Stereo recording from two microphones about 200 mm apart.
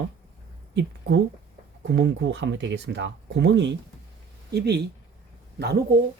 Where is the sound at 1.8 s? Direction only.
65° right (ahead or behind).